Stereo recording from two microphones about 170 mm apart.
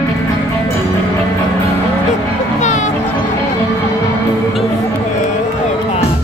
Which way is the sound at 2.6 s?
45° left (ahead or behind).